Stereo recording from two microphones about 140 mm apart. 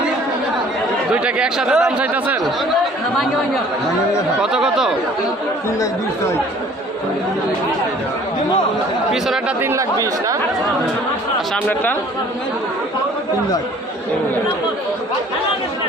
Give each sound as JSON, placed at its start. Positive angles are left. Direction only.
{"t": 1.1, "sound": "speech", "side_deg": -5}
{"t": 4.4, "sound": "speech", "side_deg": -5}
{"t": 9.1, "sound": "speech", "side_deg": 0}
{"t": 9.6, "sound": "speech", "side_deg": -20}
{"t": 11.5, "sound": "speech", "side_deg": 10}